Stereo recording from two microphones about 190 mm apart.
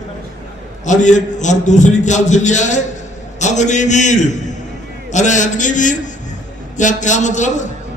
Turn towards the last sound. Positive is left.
turn(degrees=40)  # may be behind; listen again after turning